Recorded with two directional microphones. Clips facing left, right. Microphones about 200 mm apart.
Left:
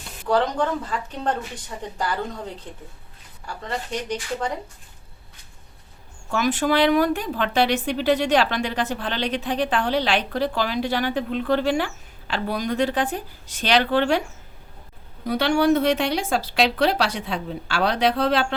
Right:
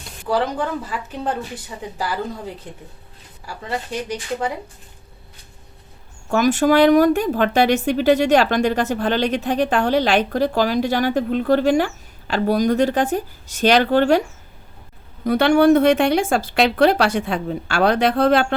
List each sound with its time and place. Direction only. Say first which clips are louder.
0.3 s speech: even; 5° right (ahead or behind)
6.3 s speech: right 6 dB; 45° right (ahead or behind)
15.2 s speech: right 6 dB; 50° right (ahead or behind)